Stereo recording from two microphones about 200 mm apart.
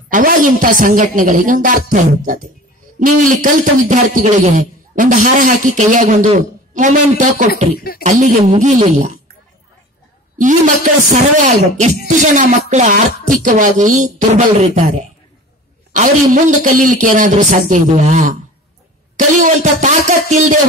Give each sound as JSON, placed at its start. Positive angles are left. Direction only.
{"t": 0.1, "sound": "a man's voice", "side_deg": -40}
{"t": 7.7, "sound": "speech", "side_deg": 50}
{"t": 8.0, "sound": "a man's voice", "side_deg": -35}
{"t": 10.3, "sound": "a man's voice", "side_deg": -40}
{"t": 16.3, "sound": "a man's voice", "side_deg": -40}